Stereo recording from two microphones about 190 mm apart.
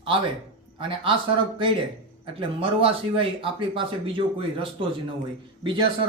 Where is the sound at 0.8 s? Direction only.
25° right (ahead or behind).